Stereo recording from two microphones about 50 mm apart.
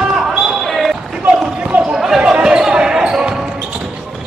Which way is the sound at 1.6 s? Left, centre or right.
Right.